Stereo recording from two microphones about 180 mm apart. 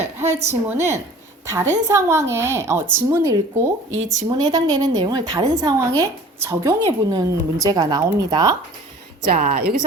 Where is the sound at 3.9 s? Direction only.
90° right.